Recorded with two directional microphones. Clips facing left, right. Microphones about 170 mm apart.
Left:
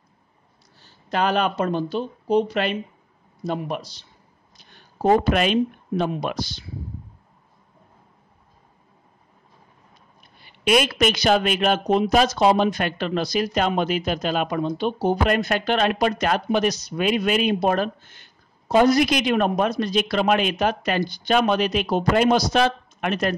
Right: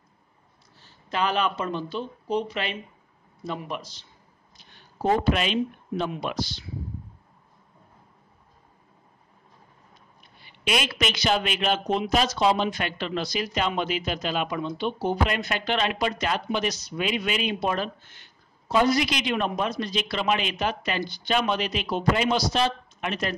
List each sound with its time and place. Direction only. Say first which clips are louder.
1.1 s speech: left 4 dB; 45° left (ahead or behind)
5.2 s speech: left 4 dB; 50° left (ahead or behind)
10.4 s speech: left 8 dB; 50° left (ahead or behind)